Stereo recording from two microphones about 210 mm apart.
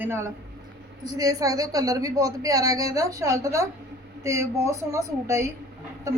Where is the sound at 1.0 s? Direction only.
15° right (ahead or behind).